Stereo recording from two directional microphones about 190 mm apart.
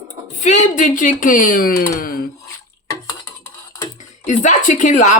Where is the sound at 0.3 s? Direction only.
40° left (ahead or behind).